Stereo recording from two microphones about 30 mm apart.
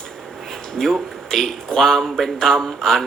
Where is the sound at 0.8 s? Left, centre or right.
Centre.